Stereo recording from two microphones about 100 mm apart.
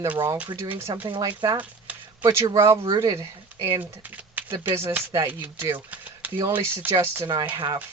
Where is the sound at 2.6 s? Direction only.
35° right (ahead or behind).